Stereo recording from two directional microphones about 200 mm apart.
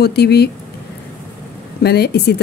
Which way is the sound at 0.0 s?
55° left (ahead or behind).